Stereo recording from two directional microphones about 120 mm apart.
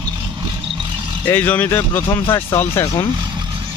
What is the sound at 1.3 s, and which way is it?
Speech, 15° left (ahead or behind).